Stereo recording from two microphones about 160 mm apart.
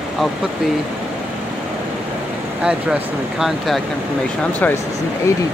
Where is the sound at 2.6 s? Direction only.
5° right (ahead or behind).